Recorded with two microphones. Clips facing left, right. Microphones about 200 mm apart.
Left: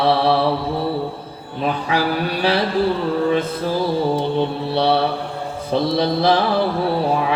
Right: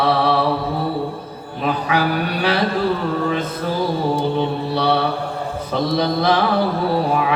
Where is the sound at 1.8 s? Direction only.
30° left (ahead or behind).